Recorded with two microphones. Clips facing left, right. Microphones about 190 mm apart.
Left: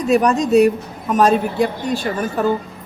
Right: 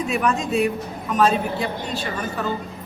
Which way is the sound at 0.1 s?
40° left (ahead or behind).